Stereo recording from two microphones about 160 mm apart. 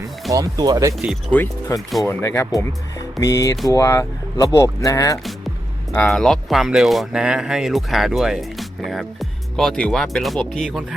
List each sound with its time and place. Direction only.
0.3 s speech: 20° right (ahead or behind)
1.3 s speech: 10° left (ahead or behind)
6.1 s speech: centre (ahead or behind)